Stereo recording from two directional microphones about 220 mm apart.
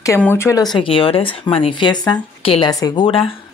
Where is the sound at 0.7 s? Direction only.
25° left (ahead or behind).